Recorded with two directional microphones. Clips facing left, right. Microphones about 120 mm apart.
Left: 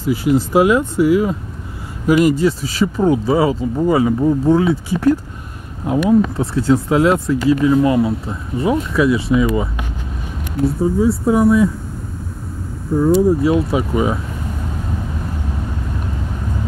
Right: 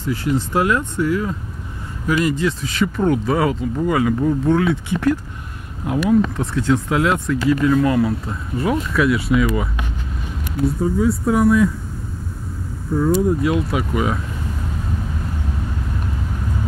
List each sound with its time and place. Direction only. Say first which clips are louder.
0.0 s speech: left 5 dB; 10° left (ahead or behind)
2.3 s speech: left 4 dB; 35° left (ahead or behind)
7.6 s speech: left 2 dB; 20° left (ahead or behind)
11.0 s speech: left 3 dB; 25° left (ahead or behind)
13.1 s speech: left 5 dB; 30° left (ahead or behind)